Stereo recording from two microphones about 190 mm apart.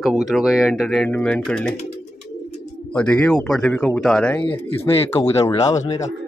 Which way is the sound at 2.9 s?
5° left (ahead or behind).